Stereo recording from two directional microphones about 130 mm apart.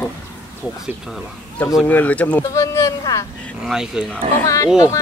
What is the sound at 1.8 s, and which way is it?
Speech, 10° left (ahead or behind).